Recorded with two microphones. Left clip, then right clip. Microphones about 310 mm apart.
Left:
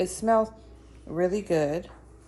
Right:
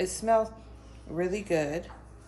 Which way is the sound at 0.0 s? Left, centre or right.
Centre.